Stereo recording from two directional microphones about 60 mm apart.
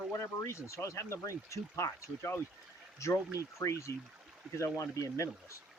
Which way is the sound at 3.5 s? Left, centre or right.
Left.